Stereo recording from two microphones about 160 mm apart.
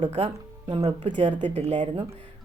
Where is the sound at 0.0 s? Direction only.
40° right (ahead or behind).